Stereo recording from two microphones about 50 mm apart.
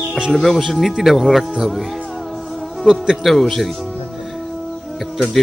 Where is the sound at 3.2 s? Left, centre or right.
Centre.